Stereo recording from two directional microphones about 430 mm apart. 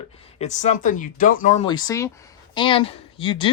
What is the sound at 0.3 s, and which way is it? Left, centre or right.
Speech, centre.